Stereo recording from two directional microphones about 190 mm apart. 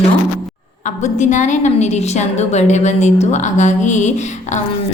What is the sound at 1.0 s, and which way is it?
A woman's voice, 40° left (ahead or behind).